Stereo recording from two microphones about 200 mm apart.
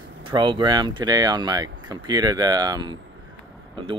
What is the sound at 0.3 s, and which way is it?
Speech, 25° right (ahead or behind).